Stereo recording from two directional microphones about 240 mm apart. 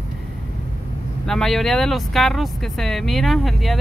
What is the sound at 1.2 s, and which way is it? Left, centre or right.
Speech, centre.